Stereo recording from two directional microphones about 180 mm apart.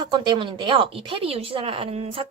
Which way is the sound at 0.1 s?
25° right (ahead or behind).